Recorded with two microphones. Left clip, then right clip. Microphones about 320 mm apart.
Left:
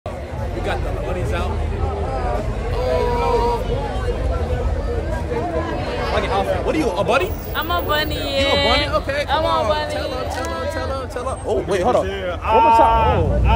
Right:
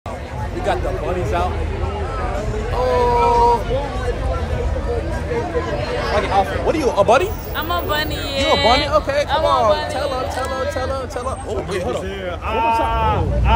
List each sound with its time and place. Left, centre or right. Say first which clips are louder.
2.8 s vehicle: right 4 dB; centre
6.0 s speech: right 2 dB; centre
7.5 s speech: left 1 dB; centre
8.6 s speech: right 3 dB; centre
9.3 s speech: right 2 dB; centre
9.9 s speech: right 3 dB; centre
12.4 s speech: left 6 dB; centre